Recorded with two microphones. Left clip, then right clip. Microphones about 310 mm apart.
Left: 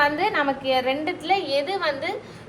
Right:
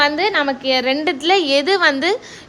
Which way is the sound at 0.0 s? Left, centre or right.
Right.